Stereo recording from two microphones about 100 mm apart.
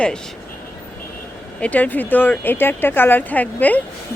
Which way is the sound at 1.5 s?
15° left (ahead or behind).